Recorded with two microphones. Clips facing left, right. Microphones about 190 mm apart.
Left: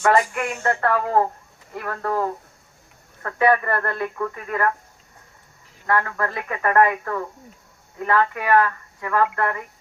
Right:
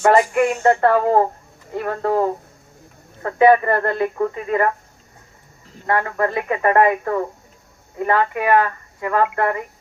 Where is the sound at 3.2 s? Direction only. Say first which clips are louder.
Right 6 dB; 20° right (ahead or behind).